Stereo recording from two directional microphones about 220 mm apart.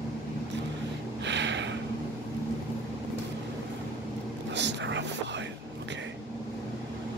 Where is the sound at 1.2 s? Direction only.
55° right (ahead or behind).